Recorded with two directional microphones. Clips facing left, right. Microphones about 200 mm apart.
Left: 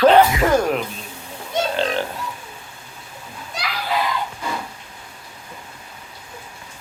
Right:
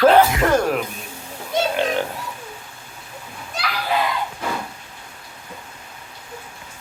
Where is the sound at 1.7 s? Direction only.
15° right (ahead or behind).